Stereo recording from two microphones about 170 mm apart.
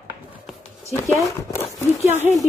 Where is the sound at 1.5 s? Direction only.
15° left (ahead or behind).